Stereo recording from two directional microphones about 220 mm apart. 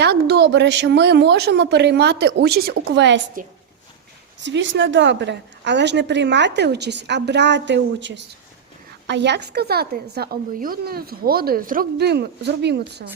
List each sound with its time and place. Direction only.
0.0 s a woman's voice: 45° right (ahead or behind)
3.4 s a woman's voice: 40° right (ahead or behind)
4.4 s a woman's voice: 55° right (ahead or behind)